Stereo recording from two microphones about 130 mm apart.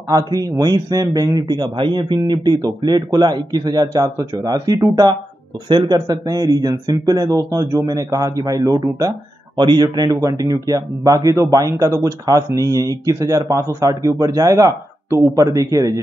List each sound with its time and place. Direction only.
0.1 s a man's voice: 30° right (ahead or behind)